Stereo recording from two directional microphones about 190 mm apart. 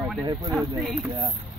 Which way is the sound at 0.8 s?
Centre (ahead or behind).